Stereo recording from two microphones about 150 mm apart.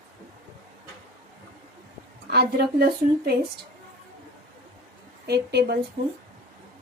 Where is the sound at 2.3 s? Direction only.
90° right.